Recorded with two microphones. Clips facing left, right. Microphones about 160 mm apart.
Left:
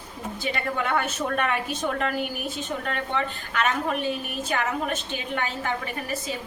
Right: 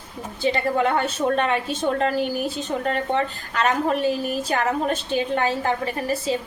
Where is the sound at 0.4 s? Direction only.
30° right (ahead or behind).